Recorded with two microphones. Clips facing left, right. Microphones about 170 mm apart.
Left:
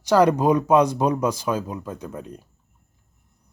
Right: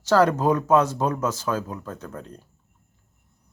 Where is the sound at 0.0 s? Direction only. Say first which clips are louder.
Left 2 dB; 15° left (ahead or behind).